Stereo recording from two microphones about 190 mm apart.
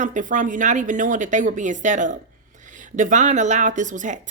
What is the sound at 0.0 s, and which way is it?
A woman's voice, 40° right (ahead or behind).